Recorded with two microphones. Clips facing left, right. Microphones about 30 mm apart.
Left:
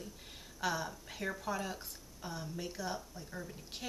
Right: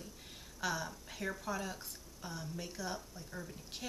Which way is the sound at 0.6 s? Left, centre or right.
Centre.